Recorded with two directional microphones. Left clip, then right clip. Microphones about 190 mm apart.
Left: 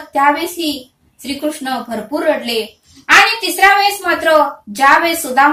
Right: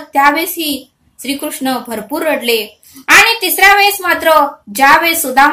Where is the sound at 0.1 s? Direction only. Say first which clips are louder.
Right 2 dB; 40° right (ahead or behind).